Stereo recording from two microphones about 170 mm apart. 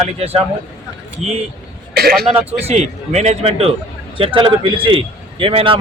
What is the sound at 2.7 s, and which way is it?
A man's voice, 40° right (ahead or behind).